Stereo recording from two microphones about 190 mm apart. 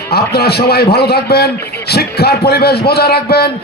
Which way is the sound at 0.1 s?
55° left (ahead or behind).